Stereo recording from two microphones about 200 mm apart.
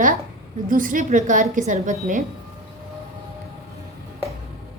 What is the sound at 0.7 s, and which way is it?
A woman's voice, 40° right (ahead or behind).